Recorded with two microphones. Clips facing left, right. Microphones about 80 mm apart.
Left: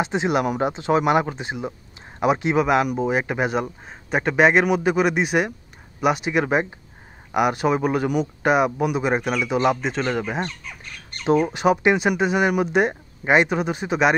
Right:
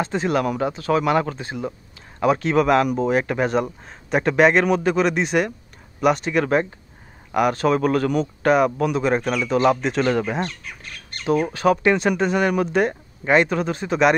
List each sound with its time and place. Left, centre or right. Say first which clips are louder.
0.0 s speech: even; centre
11.2 s speech: even; left